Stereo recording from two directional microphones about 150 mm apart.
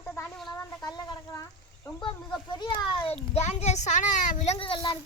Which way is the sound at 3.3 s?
45° left (ahead or behind).